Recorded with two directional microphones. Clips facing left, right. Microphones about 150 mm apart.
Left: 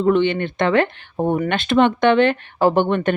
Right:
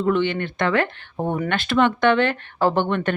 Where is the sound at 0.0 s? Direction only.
20° left (ahead or behind).